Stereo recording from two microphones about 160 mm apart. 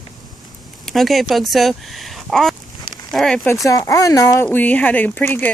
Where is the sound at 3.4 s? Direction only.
20° left (ahead or behind).